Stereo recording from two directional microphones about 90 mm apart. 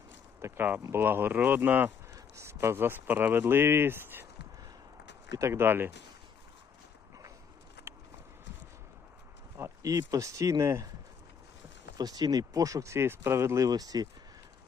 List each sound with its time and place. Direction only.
0.4 s speech: 25° right (ahead or behind)
2.1 s speech: 30° right (ahead or behind)
5.4 s speech: 30° right (ahead or behind)
9.6 s speech: 35° right (ahead or behind)
11.9 s speech: 45° right (ahead or behind)
13.7 s speech: 45° right (ahead or behind)